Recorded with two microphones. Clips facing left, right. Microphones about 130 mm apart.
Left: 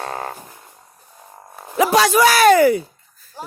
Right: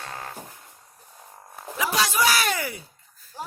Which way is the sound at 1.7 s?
60° left (ahead or behind).